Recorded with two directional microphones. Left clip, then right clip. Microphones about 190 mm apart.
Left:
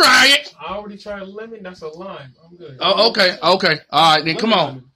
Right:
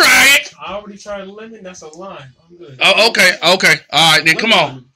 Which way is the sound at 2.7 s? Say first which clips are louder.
Right 4 dB; 15° left (ahead or behind).